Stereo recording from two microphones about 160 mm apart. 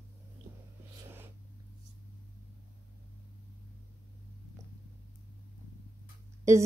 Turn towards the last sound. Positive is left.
turn(degrees=-20)  # may be behind; listen again after turning